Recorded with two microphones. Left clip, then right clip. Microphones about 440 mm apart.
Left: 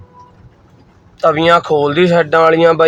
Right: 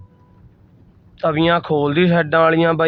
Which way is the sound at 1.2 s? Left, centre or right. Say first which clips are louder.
Left 6 dB; right.